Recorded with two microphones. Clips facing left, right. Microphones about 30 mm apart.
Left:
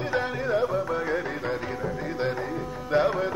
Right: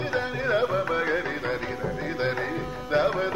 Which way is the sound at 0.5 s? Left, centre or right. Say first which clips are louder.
Right 2 dB; right.